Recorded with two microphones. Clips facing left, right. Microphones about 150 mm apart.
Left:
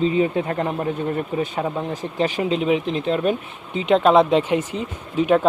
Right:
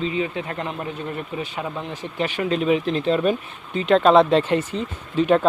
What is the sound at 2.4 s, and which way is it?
Speech, 20° left (ahead or behind).